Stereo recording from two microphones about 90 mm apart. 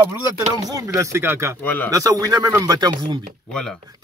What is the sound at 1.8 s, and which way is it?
Speech, 40° right (ahead or behind).